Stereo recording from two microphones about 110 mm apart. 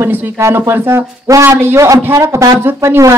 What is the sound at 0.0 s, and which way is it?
Speech, 20° right (ahead or behind).